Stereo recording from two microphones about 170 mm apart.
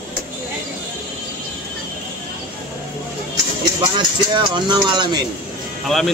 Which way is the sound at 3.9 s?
25° right (ahead or behind).